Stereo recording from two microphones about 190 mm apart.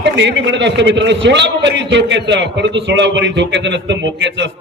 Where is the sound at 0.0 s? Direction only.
65° right (ahead or behind).